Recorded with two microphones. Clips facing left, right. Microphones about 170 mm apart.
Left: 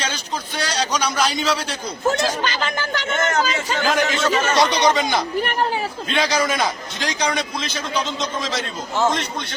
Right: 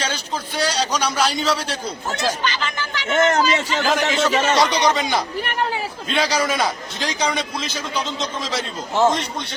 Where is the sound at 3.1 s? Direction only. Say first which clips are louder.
Right 5 dB; 35° right (ahead or behind).